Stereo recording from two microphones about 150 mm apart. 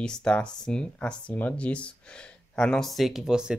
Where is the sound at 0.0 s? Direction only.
5° left (ahead or behind).